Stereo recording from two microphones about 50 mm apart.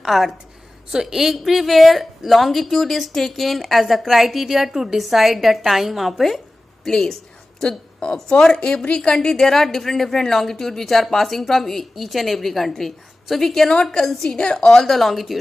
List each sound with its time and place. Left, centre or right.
0.0 s a woman's voice: centre
14.3 s speech: centre